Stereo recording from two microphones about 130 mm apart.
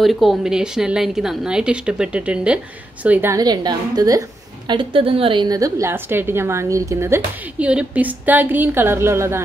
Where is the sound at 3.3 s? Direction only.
30° right (ahead or behind).